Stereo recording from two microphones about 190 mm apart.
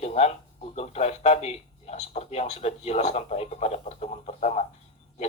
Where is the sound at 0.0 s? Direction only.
35° left (ahead or behind).